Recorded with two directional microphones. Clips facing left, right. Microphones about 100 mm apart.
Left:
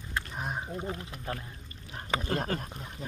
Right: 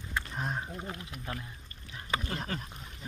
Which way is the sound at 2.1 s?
30° left (ahead or behind).